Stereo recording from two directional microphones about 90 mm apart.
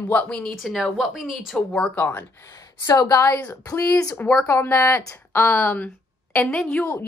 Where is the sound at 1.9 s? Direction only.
25° left (ahead or behind).